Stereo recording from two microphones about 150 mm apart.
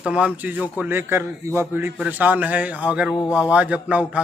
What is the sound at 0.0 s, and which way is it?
Speech, 5° right (ahead or behind).